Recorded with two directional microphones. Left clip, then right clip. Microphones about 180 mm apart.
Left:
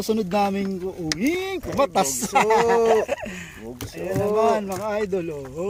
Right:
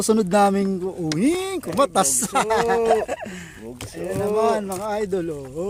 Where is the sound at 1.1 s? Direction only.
35° right (ahead or behind).